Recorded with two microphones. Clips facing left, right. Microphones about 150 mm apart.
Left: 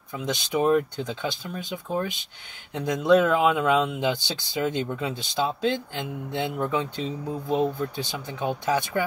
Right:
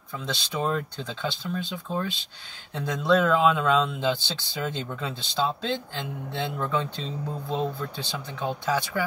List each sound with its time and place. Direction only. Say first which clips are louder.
0.1 s speech: left 5 dB; 15° left (ahead or behind)